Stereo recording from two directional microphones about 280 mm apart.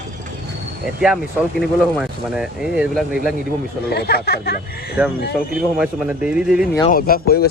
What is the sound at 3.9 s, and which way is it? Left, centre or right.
Speech, left.